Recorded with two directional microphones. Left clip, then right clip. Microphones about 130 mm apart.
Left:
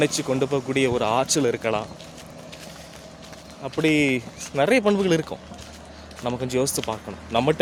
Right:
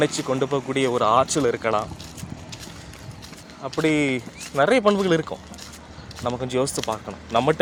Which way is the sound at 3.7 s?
20° left (ahead or behind).